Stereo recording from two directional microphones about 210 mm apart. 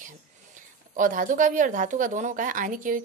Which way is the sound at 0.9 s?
40° right (ahead or behind).